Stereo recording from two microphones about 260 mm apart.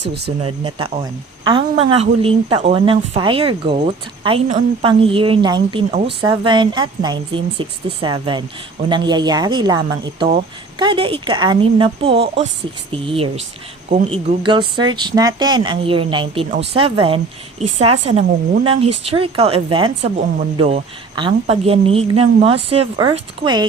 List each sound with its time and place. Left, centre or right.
0.0 s speech: right
0.4 s a woman's voice: right